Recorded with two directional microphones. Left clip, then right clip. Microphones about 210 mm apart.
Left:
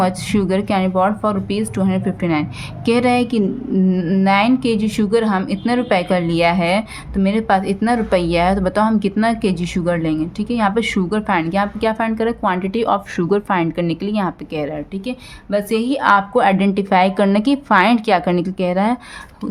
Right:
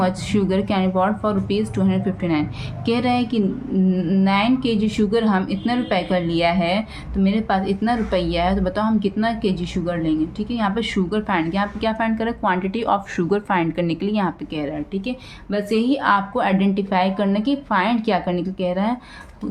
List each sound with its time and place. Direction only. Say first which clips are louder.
0.0 s a woman's voice: left 3 dB; 30° left (ahead or behind)